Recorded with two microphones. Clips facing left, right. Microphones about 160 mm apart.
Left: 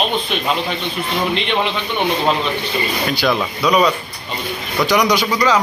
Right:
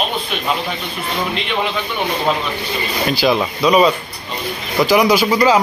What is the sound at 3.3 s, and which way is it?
Speech, 20° right (ahead or behind).